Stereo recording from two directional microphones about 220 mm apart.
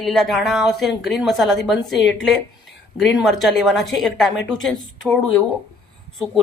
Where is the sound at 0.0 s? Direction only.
Centre (ahead or behind).